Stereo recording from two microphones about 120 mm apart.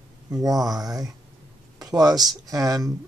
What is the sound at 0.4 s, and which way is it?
Speech, 30° right (ahead or behind).